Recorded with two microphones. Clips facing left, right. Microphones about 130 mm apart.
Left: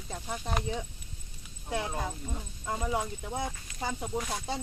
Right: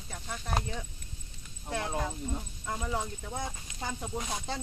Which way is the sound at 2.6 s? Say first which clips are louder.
Left 4 dB; 15° left (ahead or behind).